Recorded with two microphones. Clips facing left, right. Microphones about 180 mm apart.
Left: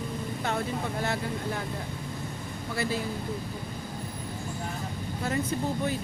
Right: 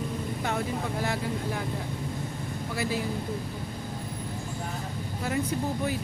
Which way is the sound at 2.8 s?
15° right (ahead or behind).